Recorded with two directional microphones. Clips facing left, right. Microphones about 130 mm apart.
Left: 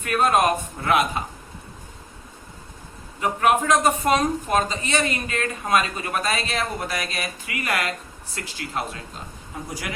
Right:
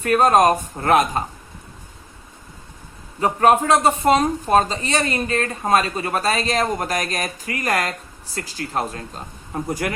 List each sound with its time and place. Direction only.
0.0 s speech: 40° right (ahead or behind)
3.2 s speech: 35° right (ahead or behind)
9.5 s speech: 50° right (ahead or behind)